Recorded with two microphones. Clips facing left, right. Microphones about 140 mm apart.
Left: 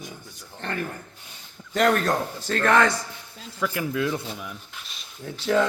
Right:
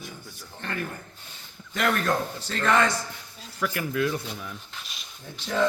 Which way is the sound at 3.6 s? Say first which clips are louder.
Left 1 dB; 20° left (ahead or behind).